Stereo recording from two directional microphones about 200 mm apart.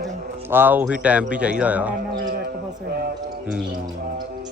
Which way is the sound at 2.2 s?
45° right (ahead or behind).